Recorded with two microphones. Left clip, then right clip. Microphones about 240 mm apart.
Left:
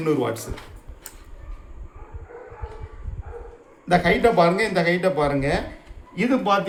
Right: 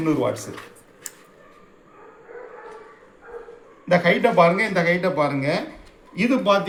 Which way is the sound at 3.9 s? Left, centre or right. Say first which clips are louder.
Even; left.